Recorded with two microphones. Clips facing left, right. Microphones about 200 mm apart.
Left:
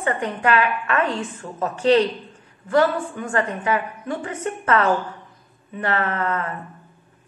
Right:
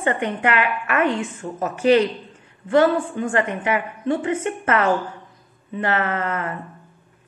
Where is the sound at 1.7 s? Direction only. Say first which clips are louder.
Right 1 dB; 30° left (ahead or behind).